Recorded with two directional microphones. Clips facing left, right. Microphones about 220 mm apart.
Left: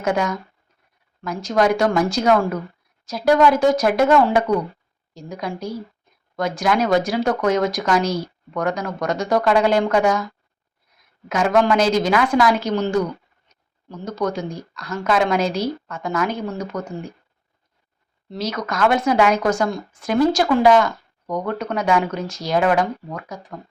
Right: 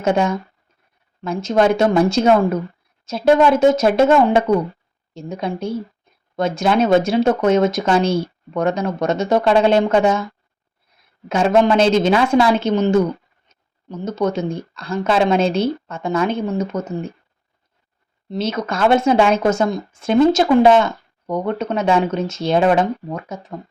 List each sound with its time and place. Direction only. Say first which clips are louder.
0.0 s speech: right 4 dB; 25° right (ahead or behind)
18.3 s speech: right 4 dB; 25° right (ahead or behind)